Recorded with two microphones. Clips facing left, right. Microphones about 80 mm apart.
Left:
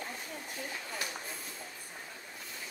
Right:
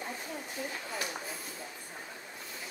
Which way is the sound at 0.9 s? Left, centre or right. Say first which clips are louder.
Right 2 dB; centre.